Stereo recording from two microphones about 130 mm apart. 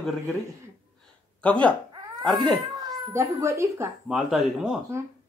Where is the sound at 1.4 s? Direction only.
10° left (ahead or behind).